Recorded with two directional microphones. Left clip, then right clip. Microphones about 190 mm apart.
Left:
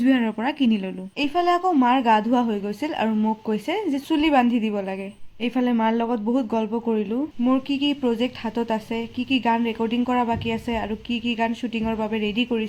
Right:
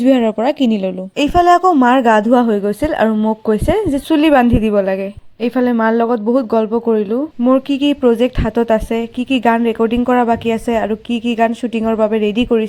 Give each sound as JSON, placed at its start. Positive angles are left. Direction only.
{"t": 0.0, "sound": "a woman's voice", "side_deg": -35}